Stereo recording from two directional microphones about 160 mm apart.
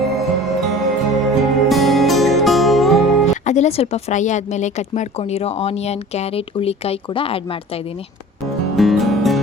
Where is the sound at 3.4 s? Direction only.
45° left (ahead or behind).